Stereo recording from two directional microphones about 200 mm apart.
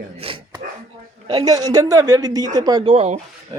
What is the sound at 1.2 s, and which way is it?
A man's voice, 25° right (ahead or behind).